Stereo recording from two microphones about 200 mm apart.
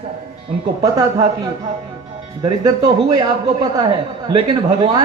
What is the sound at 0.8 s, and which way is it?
Speech, 20° right (ahead or behind).